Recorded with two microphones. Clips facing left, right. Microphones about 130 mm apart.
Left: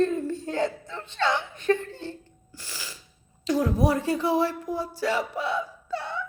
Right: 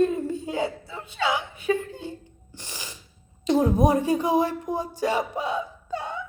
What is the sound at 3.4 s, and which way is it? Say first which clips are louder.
Speech: right 3 dB; 20° right (ahead or behind).